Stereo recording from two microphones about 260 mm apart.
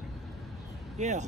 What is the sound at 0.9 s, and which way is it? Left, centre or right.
Speech, right.